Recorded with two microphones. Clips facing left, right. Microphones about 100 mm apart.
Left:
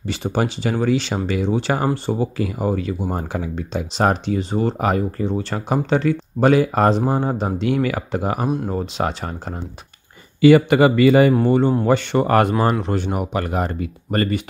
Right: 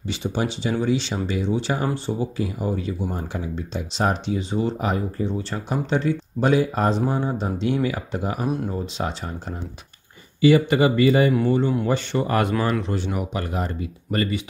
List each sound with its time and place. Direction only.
0.0 s speech: 55° left (ahead or behind)
2.3 s speech: 70° left (ahead or behind)
3.2 s speech: 90° left
4.0 s speech: 55° left (ahead or behind)
7.6 s speech: 65° left (ahead or behind)
10.4 s speech: 70° left (ahead or behind)
11.4 s speech: 55° left (ahead or behind)